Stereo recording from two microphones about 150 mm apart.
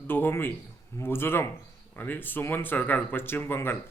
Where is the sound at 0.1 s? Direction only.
15° left (ahead or behind).